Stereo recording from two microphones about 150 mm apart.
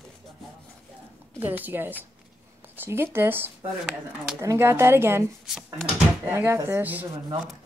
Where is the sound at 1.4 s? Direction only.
10° right (ahead or behind).